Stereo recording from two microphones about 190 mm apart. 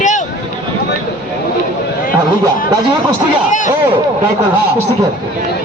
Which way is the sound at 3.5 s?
40° left (ahead or behind).